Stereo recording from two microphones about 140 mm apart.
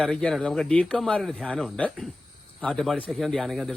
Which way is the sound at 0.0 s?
5° left (ahead or behind).